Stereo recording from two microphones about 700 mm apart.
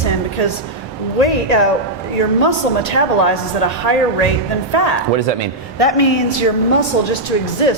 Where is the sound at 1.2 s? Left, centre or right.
Left.